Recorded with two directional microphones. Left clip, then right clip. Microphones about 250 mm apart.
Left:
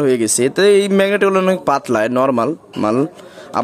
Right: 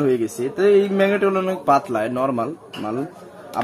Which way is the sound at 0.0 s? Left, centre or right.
Left.